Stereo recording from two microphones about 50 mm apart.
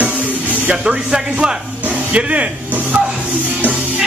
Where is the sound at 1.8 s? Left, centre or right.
Right.